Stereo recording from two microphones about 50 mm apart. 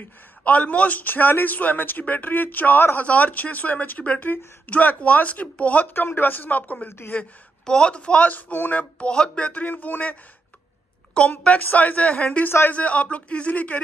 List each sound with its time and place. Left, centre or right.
0.0 s a man's voice: left
5.9 s a man's voice: left
7.6 s speech: centre; by 8.8 s left
9.0 s a man's voice: centre; by 10.1 s left
11.1 s speech: left